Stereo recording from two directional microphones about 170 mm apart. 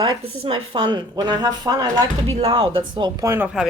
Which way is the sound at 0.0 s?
30° right (ahead or behind).